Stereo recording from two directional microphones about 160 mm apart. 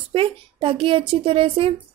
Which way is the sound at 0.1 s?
35° right (ahead or behind).